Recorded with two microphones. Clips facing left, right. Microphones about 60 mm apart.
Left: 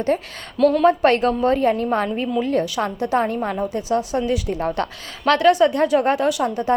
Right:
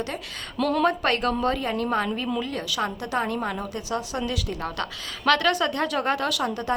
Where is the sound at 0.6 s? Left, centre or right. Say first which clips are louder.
Left 7 dB; centre.